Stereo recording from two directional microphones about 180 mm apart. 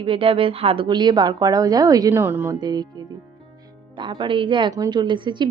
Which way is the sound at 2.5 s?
25° right (ahead or behind).